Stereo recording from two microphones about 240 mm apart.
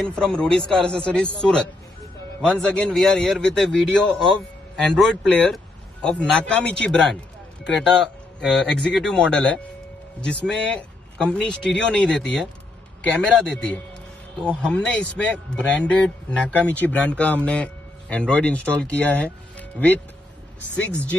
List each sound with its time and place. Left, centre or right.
0.0 s speech: centre